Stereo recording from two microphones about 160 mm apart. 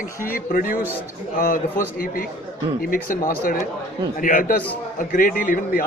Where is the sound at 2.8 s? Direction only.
65° left (ahead or behind).